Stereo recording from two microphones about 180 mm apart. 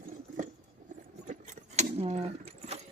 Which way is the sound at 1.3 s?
40° right (ahead or behind).